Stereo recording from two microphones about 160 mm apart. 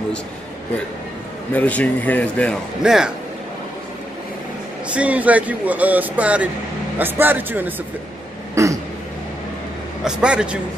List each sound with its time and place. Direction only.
1.5 s a man's voice: 10° left (ahead or behind)
2.8 s speech: 5° right (ahead or behind)
4.8 s speech: 10° right (ahead or behind)
8.6 s a sound: 20° right (ahead or behind)
10.0 s speech: 5° right (ahead or behind)